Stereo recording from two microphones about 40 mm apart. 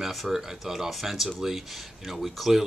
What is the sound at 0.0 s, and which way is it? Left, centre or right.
Speech, centre.